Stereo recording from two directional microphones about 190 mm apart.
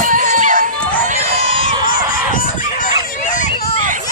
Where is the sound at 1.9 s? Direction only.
45° left (ahead or behind).